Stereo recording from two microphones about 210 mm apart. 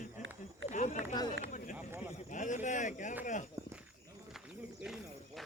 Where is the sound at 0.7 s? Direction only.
35° left (ahead or behind).